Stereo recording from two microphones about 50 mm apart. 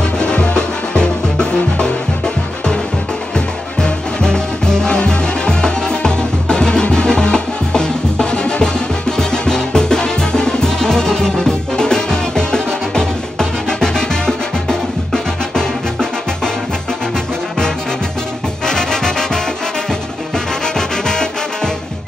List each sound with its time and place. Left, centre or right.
0.2 s music: centre
18.7 s music: centre
20.6 s music: centre